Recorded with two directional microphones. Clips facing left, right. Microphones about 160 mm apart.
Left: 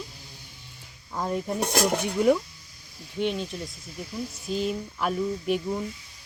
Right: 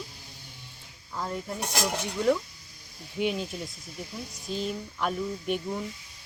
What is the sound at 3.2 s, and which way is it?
Speech, 5° right (ahead or behind).